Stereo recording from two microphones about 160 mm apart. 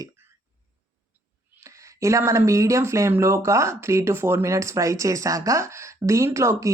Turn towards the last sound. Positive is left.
turn(degrees=-20)  # may be behind; listen again after turning